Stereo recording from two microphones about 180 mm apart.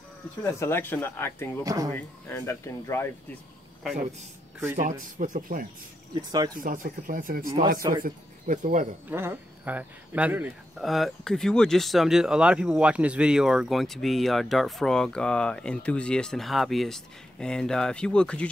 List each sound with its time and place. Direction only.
0.4 s speech: 15° left (ahead or behind)
1.6 s speech: 20° right (ahead or behind)
2.0 s speech: 10° left (ahead or behind)
4.7 s speech: 45° right (ahead or behind)
6.1 s speech: 20° right (ahead or behind)
6.5 s speech: 50° right (ahead or behind)
9.1 s speech: 10° right (ahead or behind); by 18.5 s 5° left (ahead or behind)